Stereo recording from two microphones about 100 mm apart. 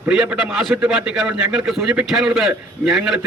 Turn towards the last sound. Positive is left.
turn(degrees=-5)  # may be behind; listen again after turning